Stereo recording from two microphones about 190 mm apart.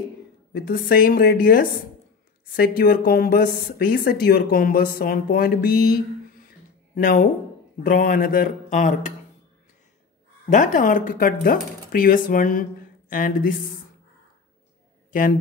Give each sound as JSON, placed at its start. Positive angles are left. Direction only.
{"t": 0.5, "sound": "speech", "side_deg": 50}
{"t": 7.0, "sound": "speech", "side_deg": 45}
{"t": 10.5, "sound": "speech", "side_deg": 45}